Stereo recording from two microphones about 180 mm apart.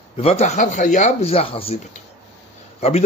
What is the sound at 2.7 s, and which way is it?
Speech, 35° left (ahead or behind).